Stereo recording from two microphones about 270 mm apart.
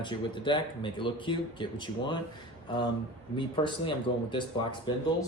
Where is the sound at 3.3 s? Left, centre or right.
Centre.